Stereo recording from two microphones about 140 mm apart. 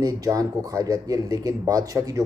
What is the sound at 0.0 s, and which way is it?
Speech, 25° right (ahead or behind).